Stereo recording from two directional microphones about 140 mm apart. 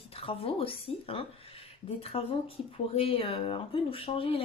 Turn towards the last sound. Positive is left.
turn(degrees=40)  # may be behind; listen again after turning